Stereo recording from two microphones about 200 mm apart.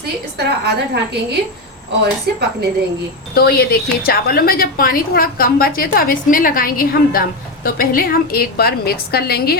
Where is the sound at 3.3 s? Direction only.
50° left (ahead or behind).